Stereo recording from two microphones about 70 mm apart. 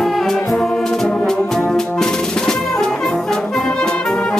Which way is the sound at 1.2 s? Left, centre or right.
Centre.